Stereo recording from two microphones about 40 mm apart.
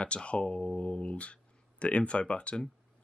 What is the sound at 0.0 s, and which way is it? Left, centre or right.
Speech, left.